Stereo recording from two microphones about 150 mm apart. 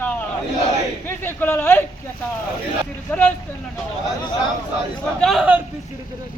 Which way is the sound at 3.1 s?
15° left (ahead or behind).